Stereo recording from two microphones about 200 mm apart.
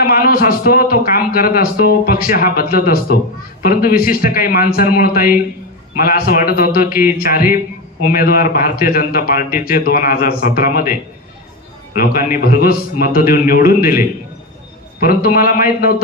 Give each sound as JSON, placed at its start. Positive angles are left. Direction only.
{"t": 0.0, "sound": "speech", "side_deg": 50}
{"t": 11.9, "sound": "speech", "side_deg": 45}